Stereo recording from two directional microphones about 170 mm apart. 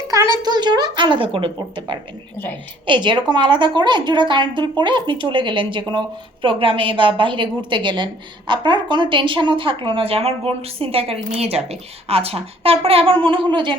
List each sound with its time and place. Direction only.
0.4 s a woman's voice: 25° right (ahead or behind)